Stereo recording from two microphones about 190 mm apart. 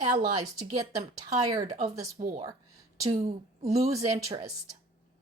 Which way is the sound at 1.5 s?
35° right (ahead or behind).